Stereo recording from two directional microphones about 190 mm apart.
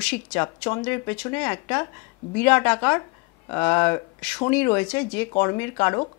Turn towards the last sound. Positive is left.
turn(degrees=15)  # may be behind; listen again after turning